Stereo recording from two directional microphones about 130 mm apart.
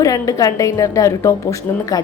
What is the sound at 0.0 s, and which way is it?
A woman's voice, 25° left (ahead or behind).